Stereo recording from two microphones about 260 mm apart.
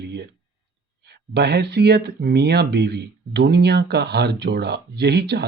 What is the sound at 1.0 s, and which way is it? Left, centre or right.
Speech, right.